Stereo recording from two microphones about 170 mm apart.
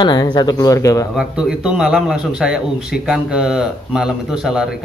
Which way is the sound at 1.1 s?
5° right (ahead or behind).